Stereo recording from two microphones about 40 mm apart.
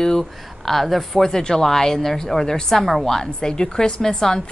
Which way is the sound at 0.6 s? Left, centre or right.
Centre.